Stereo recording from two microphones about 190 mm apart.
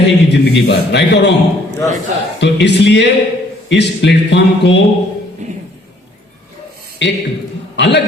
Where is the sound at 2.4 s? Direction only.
65° left (ahead or behind).